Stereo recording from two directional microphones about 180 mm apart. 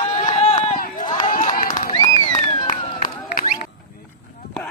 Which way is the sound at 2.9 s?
50° left (ahead or behind).